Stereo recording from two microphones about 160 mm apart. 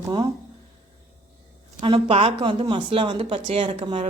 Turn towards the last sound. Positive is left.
turn(degrees=-30)  # may be behind; listen again after turning